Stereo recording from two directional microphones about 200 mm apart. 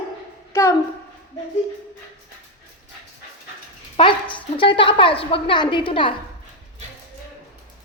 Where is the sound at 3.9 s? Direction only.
25° left (ahead or behind).